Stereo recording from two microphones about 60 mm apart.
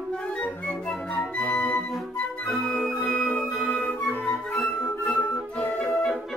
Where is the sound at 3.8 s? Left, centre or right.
Left.